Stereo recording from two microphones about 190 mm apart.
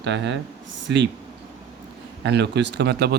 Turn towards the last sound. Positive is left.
turn(degrees=-60)  # may be behind; listen again after turning